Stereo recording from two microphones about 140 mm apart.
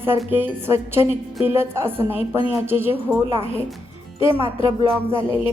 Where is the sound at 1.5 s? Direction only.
15° right (ahead or behind).